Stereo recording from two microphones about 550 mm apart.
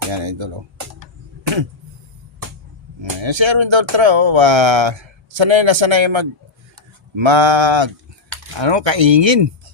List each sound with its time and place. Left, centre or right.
0.1 s speech: right
3.0 s speech: right